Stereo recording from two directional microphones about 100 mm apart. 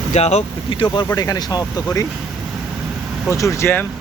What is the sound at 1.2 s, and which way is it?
Speech, 40° left (ahead or behind).